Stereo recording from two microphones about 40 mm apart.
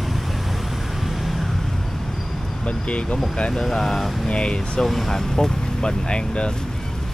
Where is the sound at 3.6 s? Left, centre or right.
Centre.